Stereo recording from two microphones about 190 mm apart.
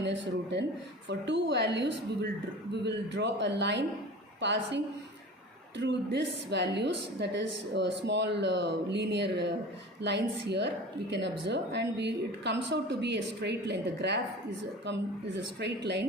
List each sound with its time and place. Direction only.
0.0 s a woman's voice: 65° right (ahead or behind)
15.6 s a woman's voice: 60° right (ahead or behind)